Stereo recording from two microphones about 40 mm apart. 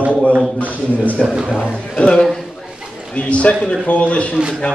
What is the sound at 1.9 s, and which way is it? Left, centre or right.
A man's voice, left.